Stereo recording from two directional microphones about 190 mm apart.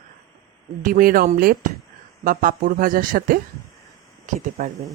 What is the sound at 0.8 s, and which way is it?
Speech, 45° right (ahead or behind).